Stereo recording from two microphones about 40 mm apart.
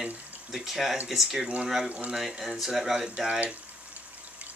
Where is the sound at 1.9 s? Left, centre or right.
Right.